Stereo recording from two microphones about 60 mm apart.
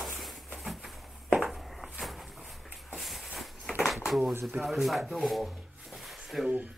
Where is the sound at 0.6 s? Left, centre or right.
Centre.